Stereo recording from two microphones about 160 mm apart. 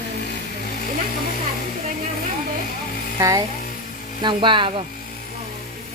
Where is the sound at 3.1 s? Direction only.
20° right (ahead or behind).